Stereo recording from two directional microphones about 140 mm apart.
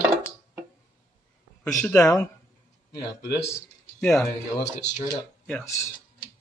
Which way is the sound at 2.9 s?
20° left (ahead or behind).